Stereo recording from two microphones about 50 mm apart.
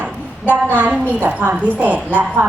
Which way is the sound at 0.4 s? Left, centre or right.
Right.